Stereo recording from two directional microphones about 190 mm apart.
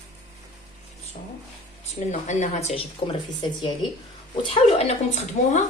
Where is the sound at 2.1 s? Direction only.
40° left (ahead or behind).